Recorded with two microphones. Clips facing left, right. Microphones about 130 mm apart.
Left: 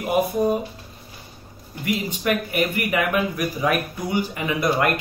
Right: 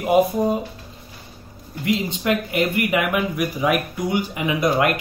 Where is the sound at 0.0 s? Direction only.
20° right (ahead or behind).